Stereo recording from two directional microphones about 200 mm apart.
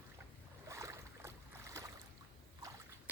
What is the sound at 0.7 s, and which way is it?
Boat, 15° right (ahead or behind).